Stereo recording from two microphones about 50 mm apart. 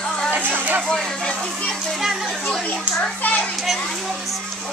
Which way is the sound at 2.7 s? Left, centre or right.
Left.